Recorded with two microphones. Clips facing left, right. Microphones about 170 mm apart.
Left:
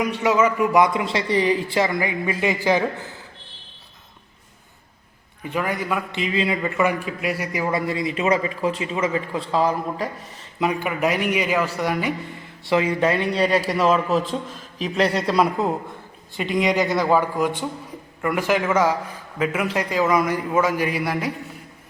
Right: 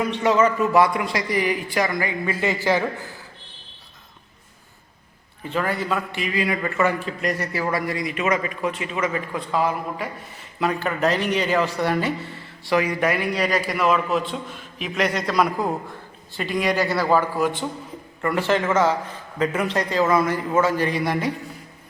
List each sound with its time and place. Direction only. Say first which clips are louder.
0.0 s speech: even; 10° left (ahead or behind)
5.4 s a man's voice: even; 15° left (ahead or behind); by 10.1 s 30° left (ahead or behind)
10.6 s a man's voice: even; 15° left (ahead or behind)